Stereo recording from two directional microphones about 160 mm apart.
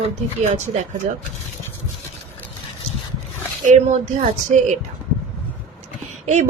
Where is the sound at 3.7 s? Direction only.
50° right (ahead or behind).